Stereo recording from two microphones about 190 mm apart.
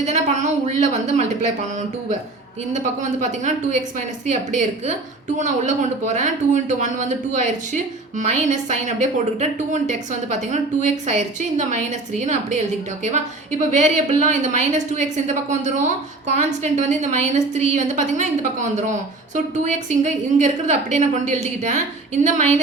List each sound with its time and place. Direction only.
0.0 s a woman's voice: 40° right (ahead or behind)
3.4 s a woman's voice: 40° right (ahead or behind)
5.4 s a woman's voice: 40° right (ahead or behind)